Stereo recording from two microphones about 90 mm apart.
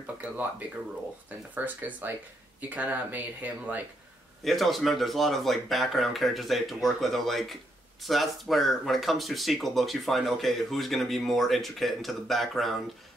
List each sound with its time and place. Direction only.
0.0 s speech: 15° right (ahead or behind)
4.5 s speech: centre (ahead or behind)